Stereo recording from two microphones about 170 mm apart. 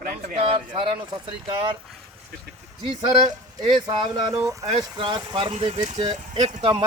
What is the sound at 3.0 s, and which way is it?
Speech, 30° right (ahead or behind).